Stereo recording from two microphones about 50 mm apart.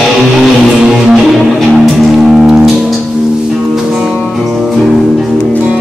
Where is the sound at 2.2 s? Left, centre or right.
Centre.